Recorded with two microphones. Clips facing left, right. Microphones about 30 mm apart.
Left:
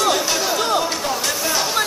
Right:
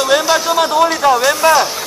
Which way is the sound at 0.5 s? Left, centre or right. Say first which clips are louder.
Right 7 dB; right.